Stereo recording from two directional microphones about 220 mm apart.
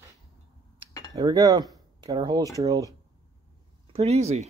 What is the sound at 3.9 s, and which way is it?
Speech, 30° right (ahead or behind).